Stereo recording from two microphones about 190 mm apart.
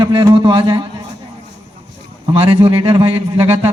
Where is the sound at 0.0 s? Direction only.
25° right (ahead or behind).